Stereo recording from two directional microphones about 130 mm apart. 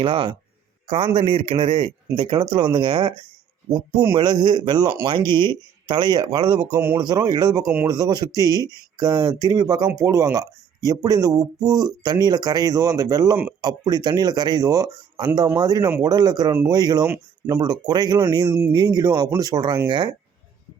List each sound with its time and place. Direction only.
0.0 s a man's voice: 40° right (ahead or behind)
4.2 s a man's voice: 35° right (ahead or behind)
6.7 s speech: 15° right (ahead or behind)
7.0 s a man's voice: 30° right (ahead or behind)
7.6 s speech: 10° right (ahead or behind)
7.9 s a man's voice: 30° right (ahead or behind)